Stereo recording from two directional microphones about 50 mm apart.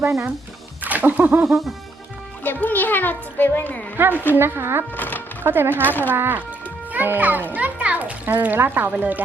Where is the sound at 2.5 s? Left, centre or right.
Left.